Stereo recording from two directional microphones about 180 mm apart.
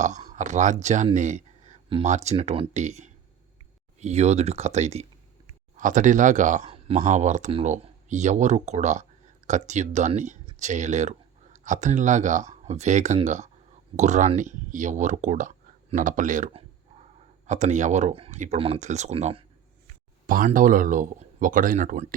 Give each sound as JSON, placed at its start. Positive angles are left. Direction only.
{"t": 0.3, "sound": "speech", "side_deg": -45}
{"t": 20.2, "sound": "speech", "side_deg": -50}